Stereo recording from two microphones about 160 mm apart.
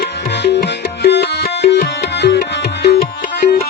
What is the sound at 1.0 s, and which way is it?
Music, 85° left.